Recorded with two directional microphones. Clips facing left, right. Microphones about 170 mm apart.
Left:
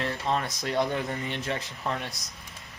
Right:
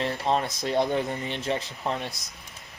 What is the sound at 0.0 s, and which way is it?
Speech, 25° right (ahead or behind).